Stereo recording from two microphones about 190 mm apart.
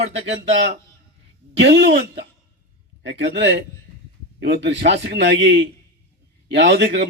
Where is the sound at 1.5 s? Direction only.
65° right (ahead or behind).